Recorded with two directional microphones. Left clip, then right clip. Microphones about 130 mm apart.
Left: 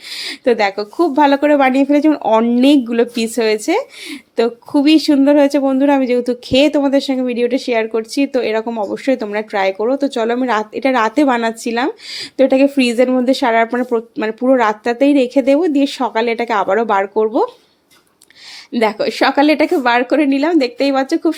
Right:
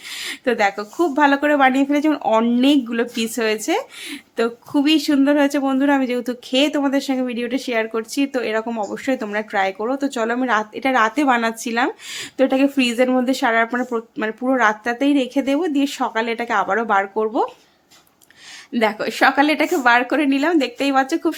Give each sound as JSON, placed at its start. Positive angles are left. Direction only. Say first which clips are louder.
{"t": 0.1, "sound": "speech", "louder": "left 6 dB", "side_deg": 30}
{"t": 18.8, "sound": "speech", "louder": "left 3 dB", "side_deg": 25}